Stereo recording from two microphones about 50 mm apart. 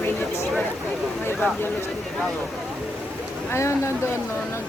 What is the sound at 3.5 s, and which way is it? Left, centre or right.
Speech, left.